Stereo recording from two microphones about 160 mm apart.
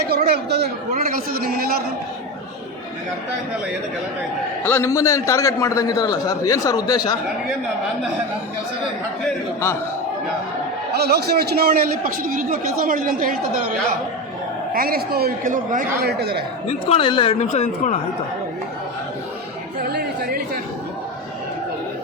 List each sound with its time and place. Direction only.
0.1 s a man's voice: 75° right (ahead or behind)
0.9 s a sound: 65° right (ahead or behind)
4.6 s a man's voice: 15° left (ahead or behind)
10.9 s a man's voice: 90° right; by 13.3 s 60° right (ahead or behind)
14.7 s speech: 65° right (ahead or behind); by 16.4 s 90° right
16.6 s speech: 35° left (ahead or behind)
19.9 s chatter: 80° right